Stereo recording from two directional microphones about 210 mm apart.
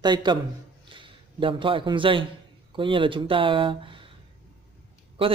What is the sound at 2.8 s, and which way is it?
Speech, 25° right (ahead or behind).